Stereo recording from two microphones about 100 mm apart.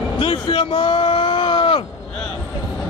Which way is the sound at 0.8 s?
55° left (ahead or behind).